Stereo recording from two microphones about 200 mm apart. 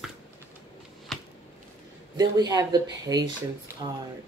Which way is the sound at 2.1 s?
20° right (ahead or behind).